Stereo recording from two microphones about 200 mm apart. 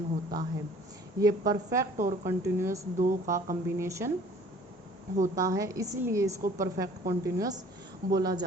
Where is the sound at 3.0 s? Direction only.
40° right (ahead or behind).